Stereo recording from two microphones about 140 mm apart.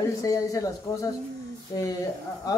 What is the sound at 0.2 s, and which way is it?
Speech, 25° left (ahead or behind).